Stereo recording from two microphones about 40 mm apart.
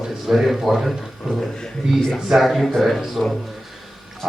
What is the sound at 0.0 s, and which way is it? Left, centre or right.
Speech, centre.